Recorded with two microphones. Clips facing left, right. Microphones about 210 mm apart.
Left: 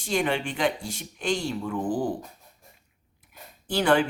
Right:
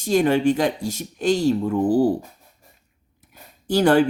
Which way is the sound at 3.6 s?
40° right (ahead or behind).